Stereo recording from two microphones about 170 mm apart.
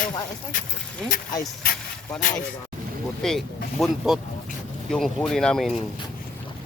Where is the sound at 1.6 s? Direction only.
55° left (ahead or behind).